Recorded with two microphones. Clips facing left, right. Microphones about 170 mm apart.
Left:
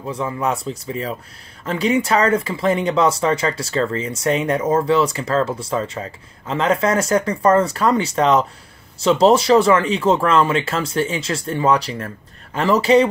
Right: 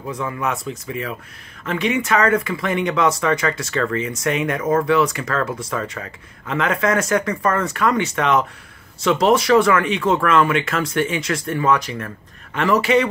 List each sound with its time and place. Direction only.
0.1 s speech: 30° left (ahead or behind)